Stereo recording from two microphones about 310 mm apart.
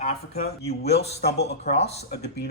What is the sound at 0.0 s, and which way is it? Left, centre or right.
Speech, left.